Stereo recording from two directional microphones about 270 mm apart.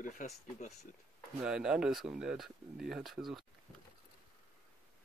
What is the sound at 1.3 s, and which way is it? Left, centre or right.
Speech, centre.